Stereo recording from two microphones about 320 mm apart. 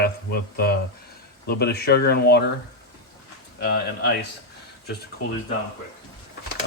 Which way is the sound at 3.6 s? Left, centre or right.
Left.